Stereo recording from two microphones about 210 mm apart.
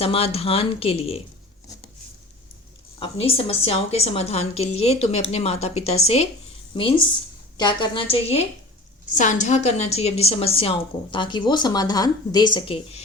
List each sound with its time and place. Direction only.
0.0 s a woman's voice: 25° left (ahead or behind)
3.0 s a woman's voice: 25° left (ahead or behind)